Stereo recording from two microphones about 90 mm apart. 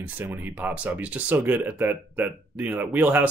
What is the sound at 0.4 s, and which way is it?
Speech, 20° right (ahead or behind).